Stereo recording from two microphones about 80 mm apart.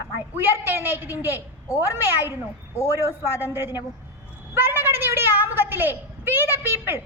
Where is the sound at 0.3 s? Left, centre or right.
Right.